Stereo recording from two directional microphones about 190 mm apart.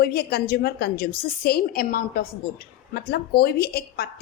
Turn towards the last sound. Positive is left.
turn(degrees=55)  # may be behind; listen again after turning